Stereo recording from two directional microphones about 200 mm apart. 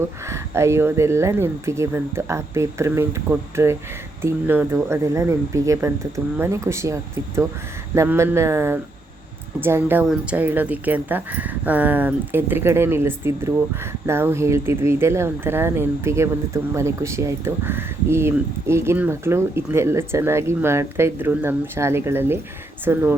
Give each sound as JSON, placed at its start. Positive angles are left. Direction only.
{"t": 0.3, "sound": "speech", "side_deg": -15}